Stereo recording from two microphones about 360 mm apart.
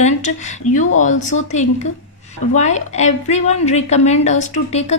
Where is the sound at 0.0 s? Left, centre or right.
Centre.